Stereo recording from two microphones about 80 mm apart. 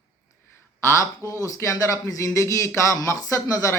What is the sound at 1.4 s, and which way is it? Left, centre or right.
Speech, left.